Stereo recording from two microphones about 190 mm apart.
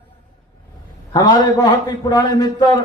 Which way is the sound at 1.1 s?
20° left (ahead or behind).